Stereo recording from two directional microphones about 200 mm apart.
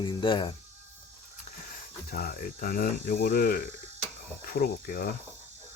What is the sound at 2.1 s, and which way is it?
Speech, 45° left (ahead or behind).